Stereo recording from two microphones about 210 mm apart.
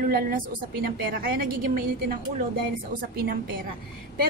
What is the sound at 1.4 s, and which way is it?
Speech, 45° right (ahead or behind).